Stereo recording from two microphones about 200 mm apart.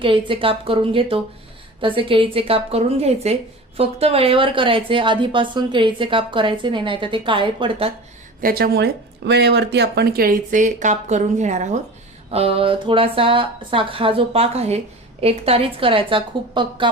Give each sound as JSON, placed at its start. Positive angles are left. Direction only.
{"t": 0.0, "sound": "a woman's voice", "side_deg": -25}
{"t": 8.4, "sound": "a woman's voice", "side_deg": -50}